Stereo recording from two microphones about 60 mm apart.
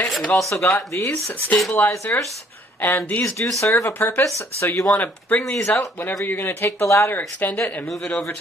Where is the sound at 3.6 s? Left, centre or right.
Left.